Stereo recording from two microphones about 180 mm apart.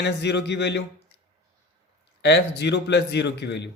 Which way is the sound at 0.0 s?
70° left (ahead or behind).